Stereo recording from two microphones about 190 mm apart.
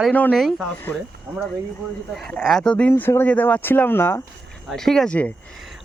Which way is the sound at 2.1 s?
Centre (ahead or behind).